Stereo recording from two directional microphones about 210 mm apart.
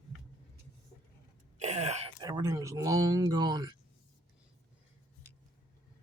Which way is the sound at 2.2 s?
20° right (ahead or behind).